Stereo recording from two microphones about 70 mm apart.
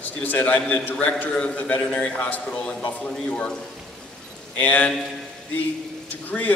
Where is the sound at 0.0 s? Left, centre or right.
Left.